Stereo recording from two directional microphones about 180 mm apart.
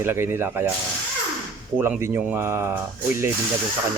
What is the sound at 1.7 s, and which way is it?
Speech, 10° right (ahead or behind).